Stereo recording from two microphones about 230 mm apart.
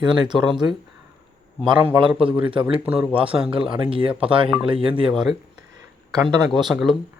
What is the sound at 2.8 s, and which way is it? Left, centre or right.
Speech, centre.